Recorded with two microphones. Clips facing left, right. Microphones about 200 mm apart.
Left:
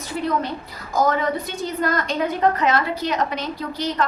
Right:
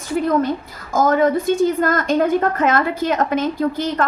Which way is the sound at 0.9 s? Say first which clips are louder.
Right 5 dB; 50° right (ahead or behind).